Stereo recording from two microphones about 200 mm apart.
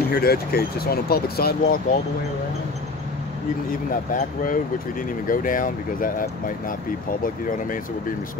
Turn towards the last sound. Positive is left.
turn(degrees=45)  # may be behind; listen again after turning